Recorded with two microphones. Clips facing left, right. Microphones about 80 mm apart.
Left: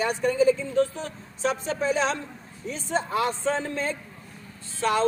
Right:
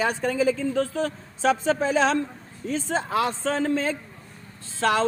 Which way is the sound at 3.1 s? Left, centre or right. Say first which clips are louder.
Right 1 dB; right.